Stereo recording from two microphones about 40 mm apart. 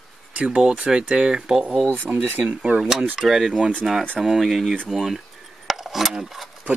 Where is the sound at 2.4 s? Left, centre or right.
Right.